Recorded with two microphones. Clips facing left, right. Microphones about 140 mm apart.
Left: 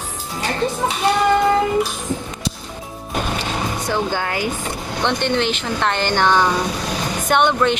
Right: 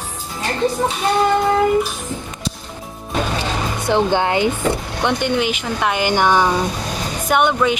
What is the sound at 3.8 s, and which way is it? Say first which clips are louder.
Speech: right 8 dB; 20° right (ahead or behind).